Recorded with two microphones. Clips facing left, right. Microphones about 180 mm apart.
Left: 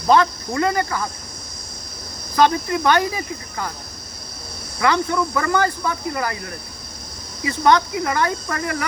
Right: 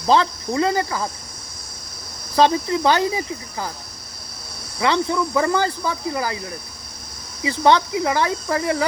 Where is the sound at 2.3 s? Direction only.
25° right (ahead or behind).